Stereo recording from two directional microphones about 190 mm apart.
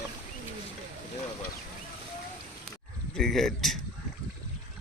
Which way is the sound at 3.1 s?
Centre (ahead or behind).